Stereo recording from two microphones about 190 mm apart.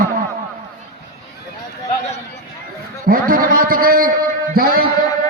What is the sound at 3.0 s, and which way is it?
A man's voice, 50° right (ahead or behind).